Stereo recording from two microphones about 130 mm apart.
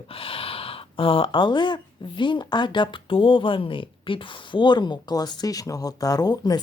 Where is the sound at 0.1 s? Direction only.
45° left (ahead or behind).